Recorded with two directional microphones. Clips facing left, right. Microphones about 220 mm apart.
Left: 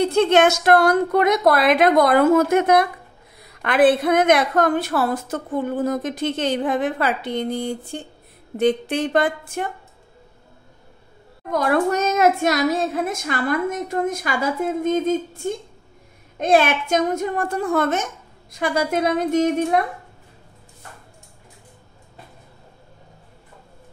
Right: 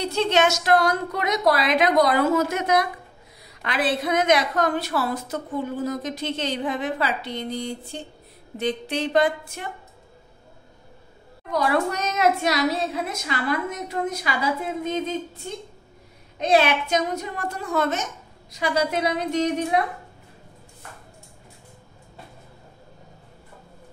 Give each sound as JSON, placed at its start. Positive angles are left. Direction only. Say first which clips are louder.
{"t": 0.0, "sound": "a woman's voice", "louder": "left 6 dB", "side_deg": 50}
{"t": 11.5, "sound": "a woman's voice", "louder": "left 4 dB", "side_deg": 50}